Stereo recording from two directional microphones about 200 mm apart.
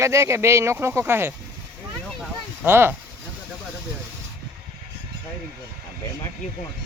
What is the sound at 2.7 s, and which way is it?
Speech, 10° right (ahead or behind).